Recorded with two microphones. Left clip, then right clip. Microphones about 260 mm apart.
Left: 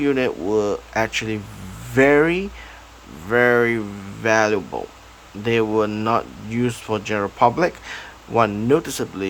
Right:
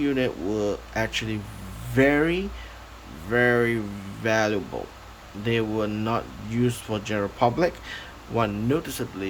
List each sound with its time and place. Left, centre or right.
0.0 s speech: centre